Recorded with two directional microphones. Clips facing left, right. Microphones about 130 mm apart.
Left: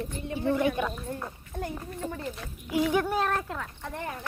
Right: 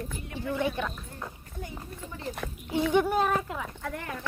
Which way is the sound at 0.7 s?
10° left (ahead or behind).